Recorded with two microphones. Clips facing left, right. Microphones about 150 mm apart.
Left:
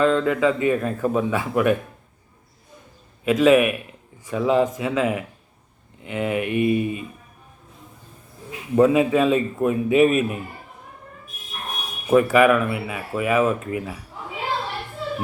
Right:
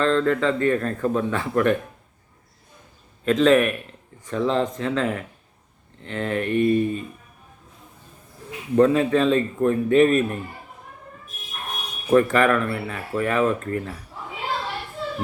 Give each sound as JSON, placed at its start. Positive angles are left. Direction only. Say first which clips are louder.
{"t": 0.0, "sound": "a man's voice", "louder": "left 1 dB", "side_deg": 10}
{"t": 3.2, "sound": "a man's voice", "louder": "left 1 dB", "side_deg": 10}
{"t": 8.7, "sound": "a man's voice", "louder": "left 1 dB", "side_deg": 10}
{"t": 12.1, "sound": "a man's voice", "louder": "left 2 dB", "side_deg": 10}